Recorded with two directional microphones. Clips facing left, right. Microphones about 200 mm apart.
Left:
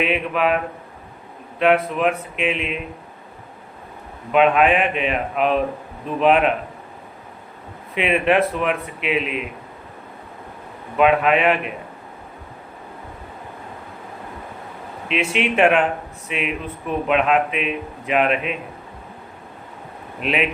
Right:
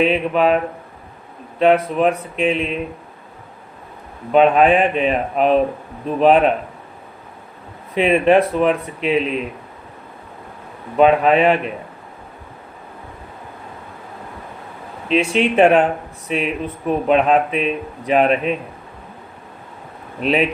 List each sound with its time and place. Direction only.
0.0 s speech: 30° right (ahead or behind)
4.3 s speech: 35° right (ahead or behind)
7.9 s speech: 35° right (ahead or behind)
10.9 s speech: 35° right (ahead or behind)
15.3 s speech: 35° right (ahead or behind)
20.1 s speech: 35° right (ahead or behind)